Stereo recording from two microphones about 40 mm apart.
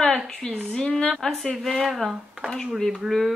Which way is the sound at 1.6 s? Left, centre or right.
Centre.